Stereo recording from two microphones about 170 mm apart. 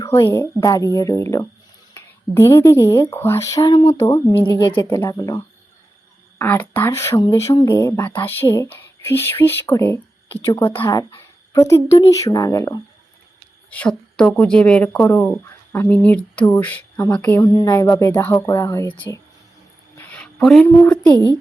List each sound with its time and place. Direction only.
0.0 s speech: 15° left (ahead or behind)
4.8 s speech: 15° left (ahead or behind)
13.7 s speech: 5° left (ahead or behind)
20.0 s a sound: 5° left (ahead or behind)